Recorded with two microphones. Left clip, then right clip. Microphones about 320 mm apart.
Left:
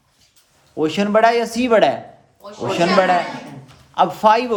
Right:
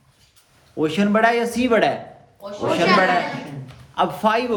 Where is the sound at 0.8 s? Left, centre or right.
Left.